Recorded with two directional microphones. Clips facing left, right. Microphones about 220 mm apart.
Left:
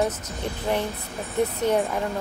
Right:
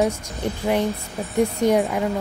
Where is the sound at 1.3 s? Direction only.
15° right (ahead or behind).